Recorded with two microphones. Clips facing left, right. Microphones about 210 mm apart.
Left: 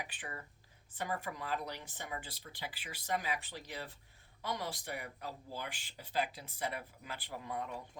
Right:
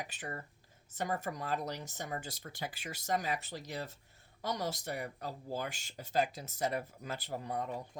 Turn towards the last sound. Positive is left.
turn(degrees=-40)  # may be behind; listen again after turning